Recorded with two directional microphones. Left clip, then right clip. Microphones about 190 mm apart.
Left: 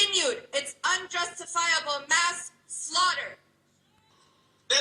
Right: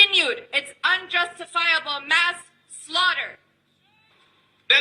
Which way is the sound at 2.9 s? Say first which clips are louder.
Right 4 dB; 50° right (ahead or behind).